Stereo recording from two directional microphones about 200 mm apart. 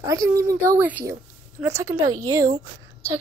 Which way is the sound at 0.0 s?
15° right (ahead or behind).